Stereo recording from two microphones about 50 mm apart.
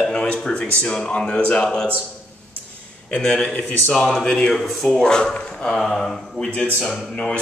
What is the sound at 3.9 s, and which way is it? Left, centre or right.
Speech, centre.